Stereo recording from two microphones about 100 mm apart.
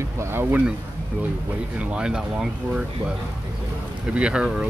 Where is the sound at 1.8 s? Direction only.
10° right (ahead or behind).